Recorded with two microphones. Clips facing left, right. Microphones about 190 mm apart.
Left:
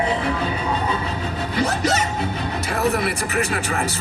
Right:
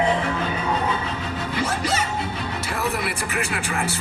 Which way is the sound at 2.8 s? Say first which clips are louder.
Left 6 dB; 40° left (ahead or behind).